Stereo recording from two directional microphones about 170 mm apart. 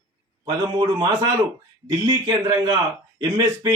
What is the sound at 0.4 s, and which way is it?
Speech, 25° right (ahead or behind).